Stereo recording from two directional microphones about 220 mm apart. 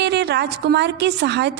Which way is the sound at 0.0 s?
50° right (ahead or behind).